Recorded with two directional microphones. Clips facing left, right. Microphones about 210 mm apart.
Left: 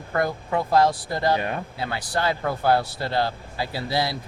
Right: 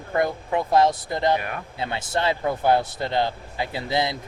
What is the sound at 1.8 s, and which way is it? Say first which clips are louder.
Speech: right 2 dB; 25° right (ahead or behind).